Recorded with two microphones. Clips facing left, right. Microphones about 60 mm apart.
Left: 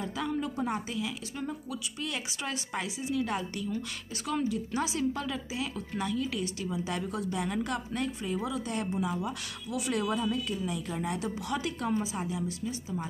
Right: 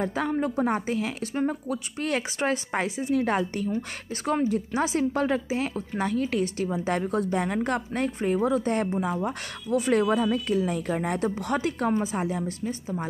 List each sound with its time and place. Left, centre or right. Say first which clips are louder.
0.0 s a woman's voice: right 6 dB; right